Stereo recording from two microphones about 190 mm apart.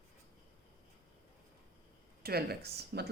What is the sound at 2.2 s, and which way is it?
Speech, 55° right (ahead or behind).